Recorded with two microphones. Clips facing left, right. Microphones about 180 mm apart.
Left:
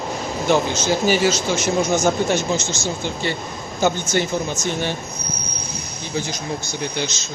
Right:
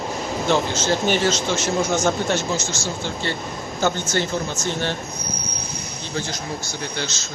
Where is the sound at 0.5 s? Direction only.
15° left (ahead or behind).